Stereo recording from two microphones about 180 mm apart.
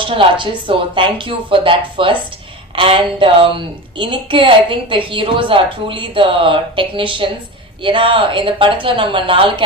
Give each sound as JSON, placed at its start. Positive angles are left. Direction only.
{"t": 0.0, "sound": "a woman's voice", "side_deg": -30}